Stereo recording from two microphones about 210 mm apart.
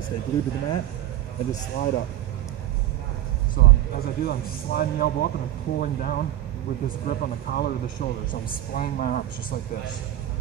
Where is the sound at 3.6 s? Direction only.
50° left (ahead or behind).